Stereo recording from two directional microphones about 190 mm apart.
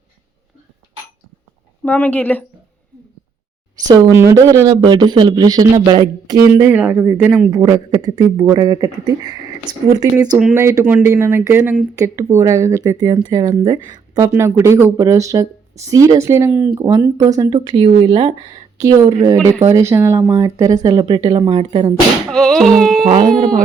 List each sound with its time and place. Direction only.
1.8 s speech: 10° left (ahead or behind)
3.8 s speech: 20° right (ahead or behind)
22.3 s a sound: 5° left (ahead or behind)